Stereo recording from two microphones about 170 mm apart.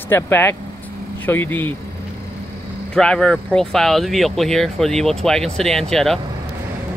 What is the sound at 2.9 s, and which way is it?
Speech, 5° left (ahead or behind).